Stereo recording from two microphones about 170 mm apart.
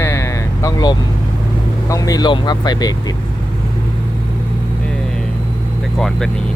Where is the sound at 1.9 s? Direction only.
20° left (ahead or behind).